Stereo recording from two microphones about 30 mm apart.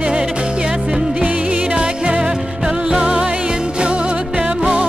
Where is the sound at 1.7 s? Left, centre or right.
Right.